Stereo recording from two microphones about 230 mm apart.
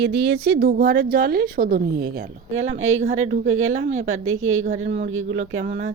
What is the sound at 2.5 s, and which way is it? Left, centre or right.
A woman's voice, right.